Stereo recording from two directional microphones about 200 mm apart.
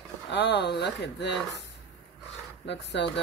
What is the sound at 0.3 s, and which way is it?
Speech, 60° left (ahead or behind).